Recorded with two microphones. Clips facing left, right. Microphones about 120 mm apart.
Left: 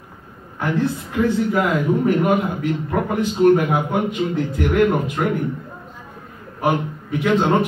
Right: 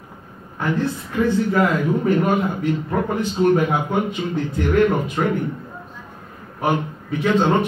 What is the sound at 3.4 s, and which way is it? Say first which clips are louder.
A man's voice: left 3 dB; 10° left (ahead or behind).